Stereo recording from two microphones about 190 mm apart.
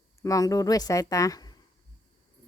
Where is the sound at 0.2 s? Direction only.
15° left (ahead or behind).